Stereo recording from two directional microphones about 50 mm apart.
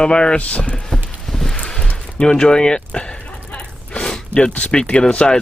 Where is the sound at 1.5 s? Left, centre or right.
Centre.